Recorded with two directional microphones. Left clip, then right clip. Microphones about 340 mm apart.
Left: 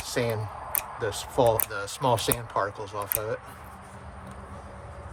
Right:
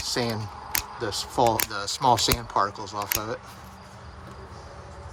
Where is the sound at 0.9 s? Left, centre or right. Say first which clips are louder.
Even; centre.